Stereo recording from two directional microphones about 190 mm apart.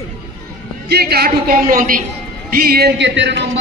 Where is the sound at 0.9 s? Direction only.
55° right (ahead or behind).